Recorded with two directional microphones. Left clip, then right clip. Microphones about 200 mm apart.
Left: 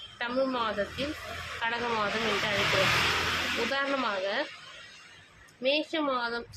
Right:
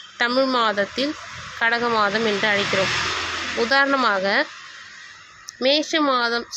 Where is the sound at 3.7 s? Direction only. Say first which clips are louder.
Right 11 dB; 35° right (ahead or behind).